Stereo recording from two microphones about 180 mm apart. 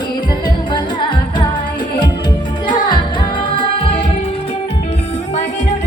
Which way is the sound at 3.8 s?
30° left (ahead or behind).